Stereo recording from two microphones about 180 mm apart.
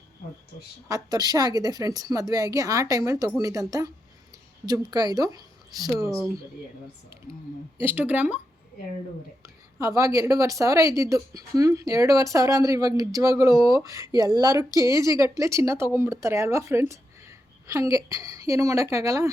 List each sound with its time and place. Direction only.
0.9 s a woman's voice: 20° right (ahead or behind)
7.8 s speech: 10° right (ahead or behind)
9.4 s a woman's voice: 15° right (ahead or behind)
14.7 s speech: 20° left (ahead or behind)
14.9 s speech: 20° right (ahead or behind)